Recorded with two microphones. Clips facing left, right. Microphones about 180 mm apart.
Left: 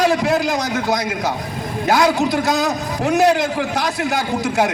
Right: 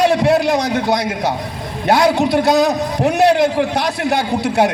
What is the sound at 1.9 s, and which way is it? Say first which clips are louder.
Speech: right 3 dB; 30° right (ahead or behind).